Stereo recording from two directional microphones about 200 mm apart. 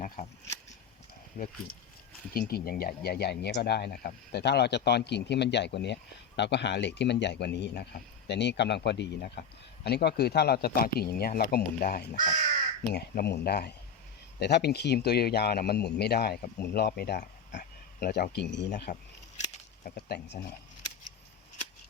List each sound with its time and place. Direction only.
1.4 s speech: 45° left (ahead or behind)
19.8 s speech: 55° left (ahead or behind)